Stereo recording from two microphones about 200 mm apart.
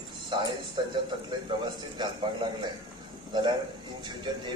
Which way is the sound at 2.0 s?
20° right (ahead or behind).